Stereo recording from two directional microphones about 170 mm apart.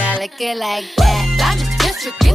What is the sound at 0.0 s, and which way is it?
Music, centre (ahead or behind).